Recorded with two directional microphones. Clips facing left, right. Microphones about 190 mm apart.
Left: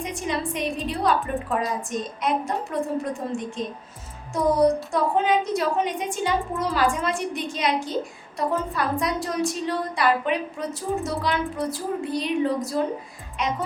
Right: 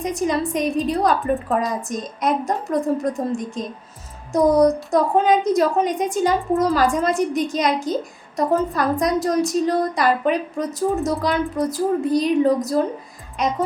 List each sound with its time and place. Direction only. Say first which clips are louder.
0.0 s a woman's voice: right 6 dB; 40° right (ahead or behind)